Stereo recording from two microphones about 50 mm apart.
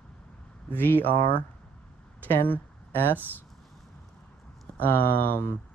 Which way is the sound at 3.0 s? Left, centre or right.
Right.